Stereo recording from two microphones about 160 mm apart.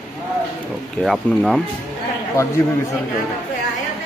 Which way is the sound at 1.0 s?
Centre (ahead or behind).